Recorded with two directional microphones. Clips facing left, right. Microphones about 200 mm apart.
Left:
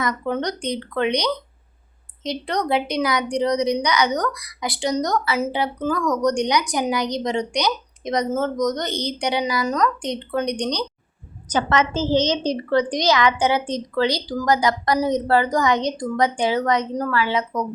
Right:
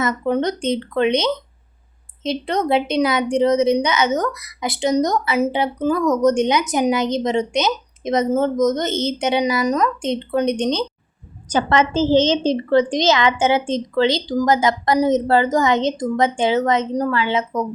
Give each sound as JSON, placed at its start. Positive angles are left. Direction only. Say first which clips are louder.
{"t": 0.0, "sound": "speech", "louder": "right 4 dB", "side_deg": -20}